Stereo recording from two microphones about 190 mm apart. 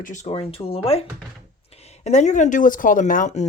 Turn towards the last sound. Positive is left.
turn(degrees=40)  # may be behind; listen again after turning